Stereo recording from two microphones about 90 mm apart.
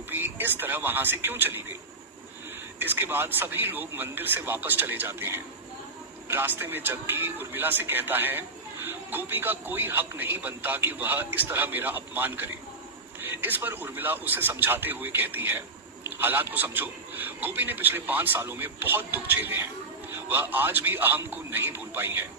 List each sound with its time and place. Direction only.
0.1 s speech: 20° right (ahead or behind)
2.7 s a man's voice: 20° right (ahead or behind)